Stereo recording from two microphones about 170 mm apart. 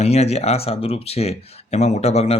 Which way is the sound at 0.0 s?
40° left (ahead or behind).